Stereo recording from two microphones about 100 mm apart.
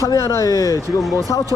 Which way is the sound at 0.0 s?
30° left (ahead or behind).